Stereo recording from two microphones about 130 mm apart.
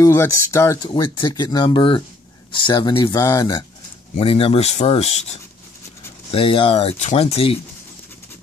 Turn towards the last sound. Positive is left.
turn(degrees=50)  # may be behind; listen again after turning